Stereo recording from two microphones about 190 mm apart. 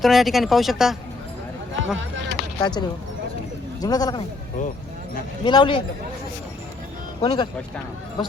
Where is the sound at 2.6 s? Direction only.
25° left (ahead or behind).